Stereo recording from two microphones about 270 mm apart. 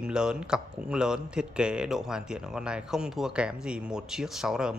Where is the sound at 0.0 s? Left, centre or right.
Centre.